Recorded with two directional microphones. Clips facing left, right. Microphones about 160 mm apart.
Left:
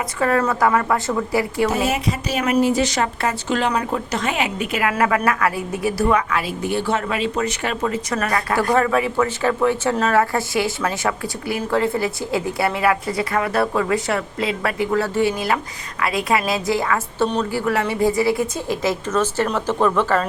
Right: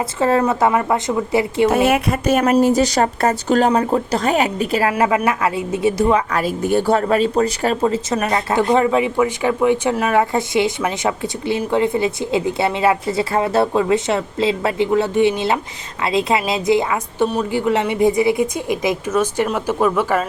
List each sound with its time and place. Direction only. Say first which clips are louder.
0.2 s speech: right 2 dB; 25° right (ahead or behind)
1.9 s speech: right 6 dB; 55° right (ahead or behind)
2.4 s a woman's voice: right 2 dB; 40° right (ahead or behind)
3.7 s a woman's voice: right 5 dB; 30° right (ahead or behind)
5.0 s speech: right 2 dB; 20° right (ahead or behind)
6.3 s a woman's voice: right 5 dB; 45° right (ahead or behind); by 20.2 s 10° right (ahead or behind)